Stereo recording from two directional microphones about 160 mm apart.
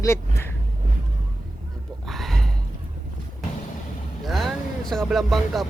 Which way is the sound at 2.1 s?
Centre (ahead or behind).